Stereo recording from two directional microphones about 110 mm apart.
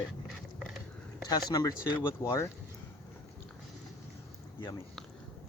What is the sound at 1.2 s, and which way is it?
Speech, 35° left (ahead or behind).